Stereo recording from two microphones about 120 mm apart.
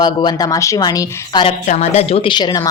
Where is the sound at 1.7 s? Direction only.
60° left (ahead or behind); by 2.7 s 35° left (ahead or behind).